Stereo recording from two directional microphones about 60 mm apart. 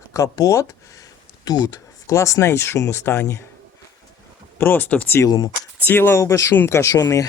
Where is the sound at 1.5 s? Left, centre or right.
Left.